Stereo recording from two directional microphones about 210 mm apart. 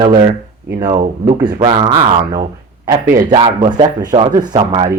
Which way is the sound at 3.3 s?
20° right (ahead or behind).